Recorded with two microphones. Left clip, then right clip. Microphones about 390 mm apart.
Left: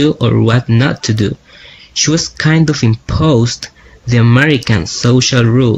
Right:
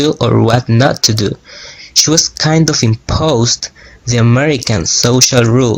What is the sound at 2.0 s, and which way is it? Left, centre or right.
Speech, centre.